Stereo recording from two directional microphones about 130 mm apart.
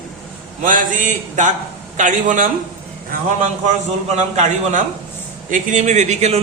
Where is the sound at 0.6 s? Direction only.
90° right.